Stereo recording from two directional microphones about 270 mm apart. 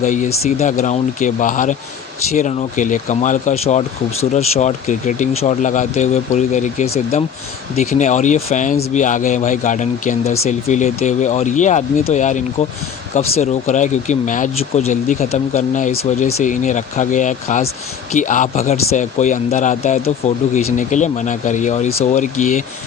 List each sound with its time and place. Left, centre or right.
0.0 s speech: left